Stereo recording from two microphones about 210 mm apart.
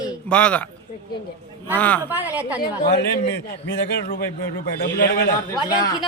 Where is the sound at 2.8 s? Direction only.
50° left (ahead or behind).